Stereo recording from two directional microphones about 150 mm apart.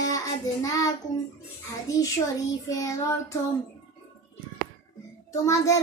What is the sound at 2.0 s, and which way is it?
Child singing, 20° left (ahead or behind).